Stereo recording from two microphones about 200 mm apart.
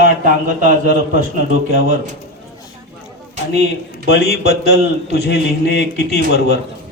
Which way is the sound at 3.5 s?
55° left (ahead or behind).